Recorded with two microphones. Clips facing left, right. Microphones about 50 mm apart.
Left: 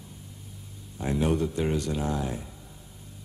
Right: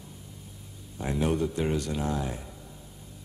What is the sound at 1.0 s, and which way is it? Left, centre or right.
A man's voice, centre.